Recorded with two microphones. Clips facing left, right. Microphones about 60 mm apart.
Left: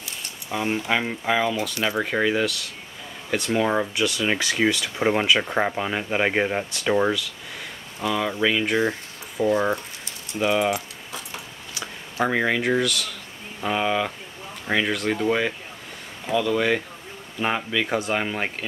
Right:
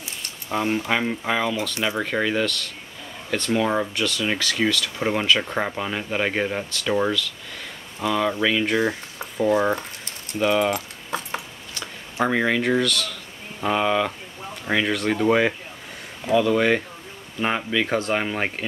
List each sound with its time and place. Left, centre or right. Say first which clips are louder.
0.8 s speech: even; centre
8.0 s speech: right 1 dB; centre
11.1 s a sound: right 8 dB; right
12.3 s speech: right 1 dB; centre
15.2 s speech: right 7 dB; centre